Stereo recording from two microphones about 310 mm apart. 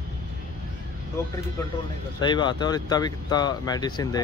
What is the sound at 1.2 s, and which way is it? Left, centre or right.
Speech, centre.